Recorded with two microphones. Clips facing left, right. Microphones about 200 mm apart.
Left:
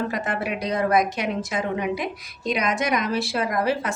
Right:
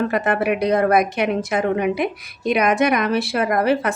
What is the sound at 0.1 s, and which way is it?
Speech, 60° right (ahead or behind).